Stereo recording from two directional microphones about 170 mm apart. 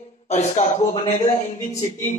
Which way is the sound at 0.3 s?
45° left (ahead or behind).